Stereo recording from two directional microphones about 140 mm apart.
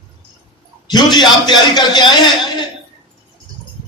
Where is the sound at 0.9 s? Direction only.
30° left (ahead or behind).